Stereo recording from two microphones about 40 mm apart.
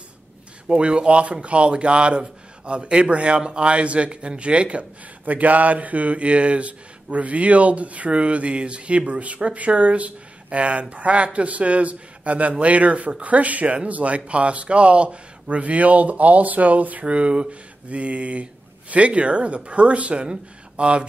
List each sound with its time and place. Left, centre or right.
0.7 s a man's voice: right
5.2 s speech: right
17.0 s speech: right